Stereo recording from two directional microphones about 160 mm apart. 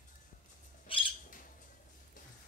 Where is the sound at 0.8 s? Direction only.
35° left (ahead or behind).